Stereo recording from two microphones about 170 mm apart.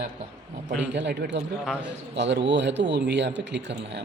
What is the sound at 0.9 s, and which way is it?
Speech, 85° right.